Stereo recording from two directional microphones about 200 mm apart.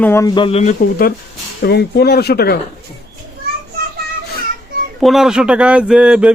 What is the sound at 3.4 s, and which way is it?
Children playing, 50° right (ahead or behind).